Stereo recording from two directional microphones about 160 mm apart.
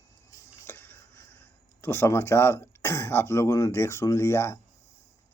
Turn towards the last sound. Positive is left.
turn(degrees=15)  # may be behind; listen again after turning